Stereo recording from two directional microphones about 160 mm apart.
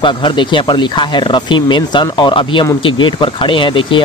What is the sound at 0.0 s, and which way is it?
Speech, 30° left (ahead or behind).